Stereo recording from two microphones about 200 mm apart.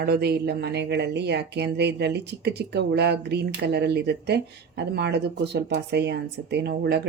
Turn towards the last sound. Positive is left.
turn(degrees=-55)  # may be behind; listen again after turning